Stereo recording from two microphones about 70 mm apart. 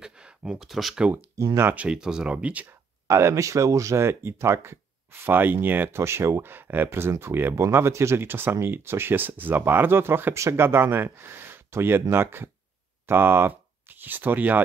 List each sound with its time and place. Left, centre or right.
0.0 s a sound: centre
1.3 s speech: right
1.8 s speech: centre
3.1 s speech: right